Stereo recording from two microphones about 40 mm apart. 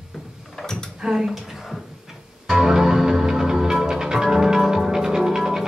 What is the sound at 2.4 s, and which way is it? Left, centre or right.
Music, centre.